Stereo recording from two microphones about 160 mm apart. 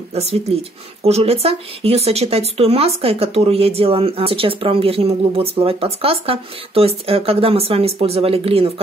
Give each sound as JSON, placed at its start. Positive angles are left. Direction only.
{"t": 0.1, "sound": "speech", "side_deg": -40}